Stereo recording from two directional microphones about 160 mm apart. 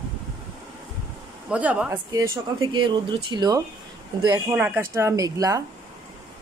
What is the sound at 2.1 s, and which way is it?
Speech, 25° right (ahead or behind).